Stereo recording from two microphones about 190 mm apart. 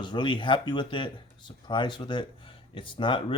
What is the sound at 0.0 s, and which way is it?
Speech, 25° left (ahead or behind).